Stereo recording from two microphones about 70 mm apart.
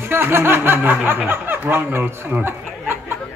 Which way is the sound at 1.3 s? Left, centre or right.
Right.